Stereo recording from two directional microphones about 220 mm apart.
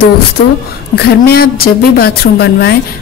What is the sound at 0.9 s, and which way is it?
A woman's voice, 45° left (ahead or behind).